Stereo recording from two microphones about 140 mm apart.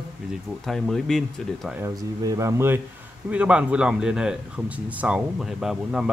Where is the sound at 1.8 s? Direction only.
20° right (ahead or behind).